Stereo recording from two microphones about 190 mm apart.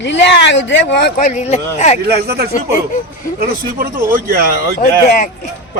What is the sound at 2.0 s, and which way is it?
Speech, 55° right (ahead or behind).